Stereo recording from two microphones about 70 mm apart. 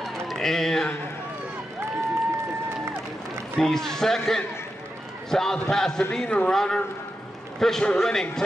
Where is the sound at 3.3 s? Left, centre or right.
Centre.